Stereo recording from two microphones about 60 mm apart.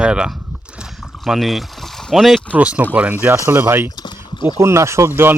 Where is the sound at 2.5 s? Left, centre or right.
Right.